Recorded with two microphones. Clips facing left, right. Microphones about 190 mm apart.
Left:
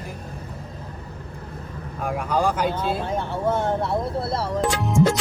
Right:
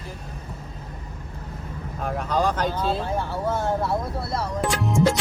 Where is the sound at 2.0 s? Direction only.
10° left (ahead or behind).